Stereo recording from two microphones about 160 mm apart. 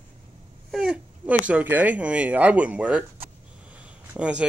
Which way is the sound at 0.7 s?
5° right (ahead or behind).